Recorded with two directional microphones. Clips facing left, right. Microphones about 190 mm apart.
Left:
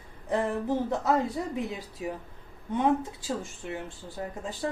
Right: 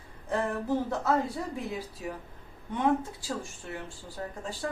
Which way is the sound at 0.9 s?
20° left (ahead or behind).